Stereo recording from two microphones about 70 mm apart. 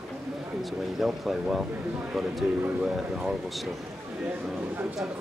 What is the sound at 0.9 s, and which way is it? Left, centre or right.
Speech, centre.